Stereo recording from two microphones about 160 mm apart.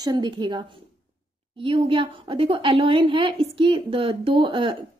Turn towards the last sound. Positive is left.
turn(degrees=-30)  # may be behind; listen again after turning